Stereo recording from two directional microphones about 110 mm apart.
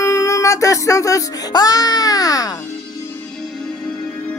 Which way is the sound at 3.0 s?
20° left (ahead or behind).